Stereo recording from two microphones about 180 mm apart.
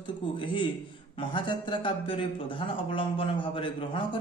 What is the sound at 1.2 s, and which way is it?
A man's voice, 25° left (ahead or behind).